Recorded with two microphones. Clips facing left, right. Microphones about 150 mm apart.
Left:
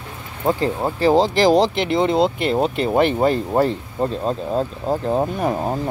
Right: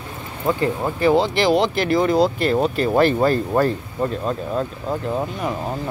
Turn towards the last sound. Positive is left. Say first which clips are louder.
# left 4 dB
turn(degrees=45)  # may be behind; listen again after turning